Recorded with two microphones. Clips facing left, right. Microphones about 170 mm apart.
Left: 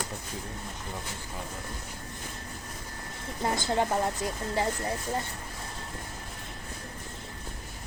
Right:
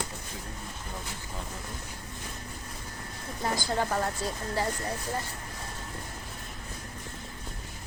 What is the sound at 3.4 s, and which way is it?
A woman's voice, 25° left (ahead or behind).